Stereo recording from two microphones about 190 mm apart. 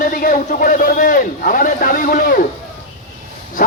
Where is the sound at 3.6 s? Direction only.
50° left (ahead or behind).